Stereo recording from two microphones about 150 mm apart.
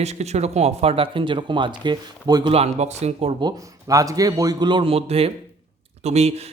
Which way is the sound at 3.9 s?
20° right (ahead or behind).